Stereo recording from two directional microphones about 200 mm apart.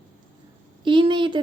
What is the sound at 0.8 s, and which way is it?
Speech, 25° right (ahead or behind).